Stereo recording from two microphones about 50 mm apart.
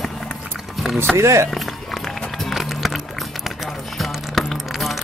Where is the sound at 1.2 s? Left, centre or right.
Right.